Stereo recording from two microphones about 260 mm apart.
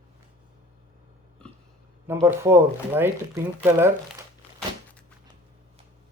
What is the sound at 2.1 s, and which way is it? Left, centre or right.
Speech, centre.